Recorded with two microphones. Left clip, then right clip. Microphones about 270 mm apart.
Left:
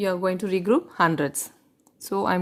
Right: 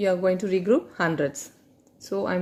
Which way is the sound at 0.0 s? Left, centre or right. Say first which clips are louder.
Right 2 dB; left.